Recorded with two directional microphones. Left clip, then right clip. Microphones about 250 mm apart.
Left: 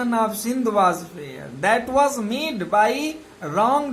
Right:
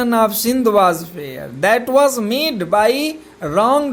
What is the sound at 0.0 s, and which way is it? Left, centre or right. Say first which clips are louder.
Speech: right 7 dB; right.